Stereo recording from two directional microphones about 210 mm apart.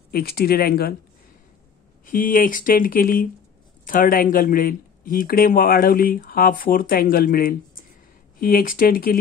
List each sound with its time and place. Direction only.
0.1 s speech: 45° left (ahead or behind)
2.0 s speech: 40° left (ahead or behind)